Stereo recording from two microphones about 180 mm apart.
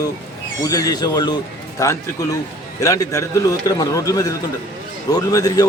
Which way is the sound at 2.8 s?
20° left (ahead or behind).